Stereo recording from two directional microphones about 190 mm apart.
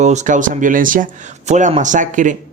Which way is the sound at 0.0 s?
40° right (ahead or behind).